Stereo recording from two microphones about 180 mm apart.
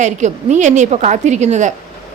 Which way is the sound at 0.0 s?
40° right (ahead or behind).